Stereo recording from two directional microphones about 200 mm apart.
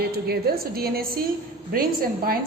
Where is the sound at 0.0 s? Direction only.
50° right (ahead or behind).